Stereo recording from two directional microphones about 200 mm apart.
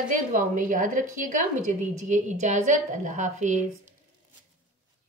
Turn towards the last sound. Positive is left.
turn(degrees=-40)  # may be behind; listen again after turning